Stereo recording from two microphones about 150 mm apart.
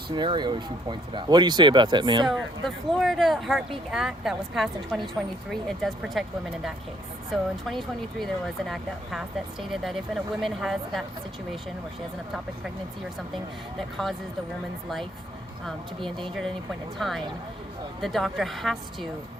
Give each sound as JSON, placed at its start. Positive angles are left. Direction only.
{"t": 0.1, "sound": "speech", "side_deg": -30}
{"t": 2.2, "sound": "speech", "side_deg": 0}
{"t": 13.3, "sound": "speech", "side_deg": 0}
{"t": 16.0, "sound": "speech", "side_deg": -35}
{"t": 17.0, "sound": "speech", "side_deg": 0}